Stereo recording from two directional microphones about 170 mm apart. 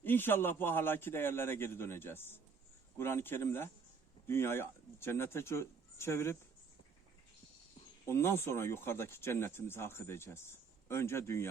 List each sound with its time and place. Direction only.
0.0 s speech: 10° left (ahead or behind)
8.0 s speech: 15° left (ahead or behind)